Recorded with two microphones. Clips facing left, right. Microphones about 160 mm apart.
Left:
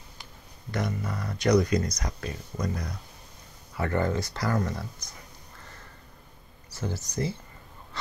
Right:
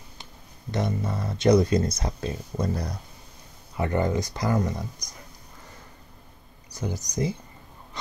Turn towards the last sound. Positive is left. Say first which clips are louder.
# right 3 dB
turn(degrees=-15)  # may be behind; listen again after turning